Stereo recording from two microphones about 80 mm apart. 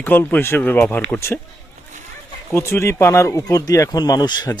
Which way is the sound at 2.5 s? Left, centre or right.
Left.